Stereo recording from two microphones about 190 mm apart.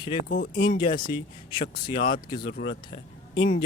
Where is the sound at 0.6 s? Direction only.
25° left (ahead or behind).